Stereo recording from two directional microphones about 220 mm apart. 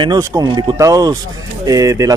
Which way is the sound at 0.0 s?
15° right (ahead or behind).